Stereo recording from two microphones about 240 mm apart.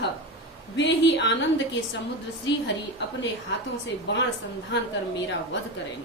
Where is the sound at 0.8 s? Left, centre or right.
Left.